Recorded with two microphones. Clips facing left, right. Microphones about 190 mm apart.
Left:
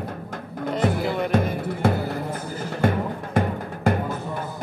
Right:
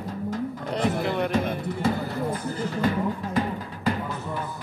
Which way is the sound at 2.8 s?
50° left (ahead or behind).